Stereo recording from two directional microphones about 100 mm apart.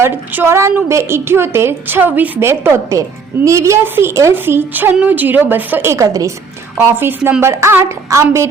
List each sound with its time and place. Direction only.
0.0 s a woman's voice: 25° right (ahead or behind)